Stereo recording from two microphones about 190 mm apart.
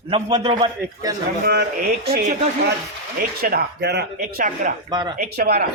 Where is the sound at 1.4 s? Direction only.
55° right (ahead or behind).